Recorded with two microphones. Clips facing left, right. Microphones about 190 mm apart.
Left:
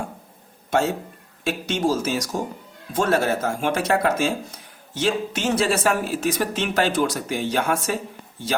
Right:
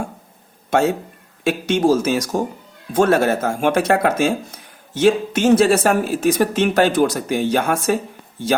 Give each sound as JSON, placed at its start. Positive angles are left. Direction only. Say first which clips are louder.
{"t": 1.5, "sound": "speech", "louder": "right 6 dB", "side_deg": -55}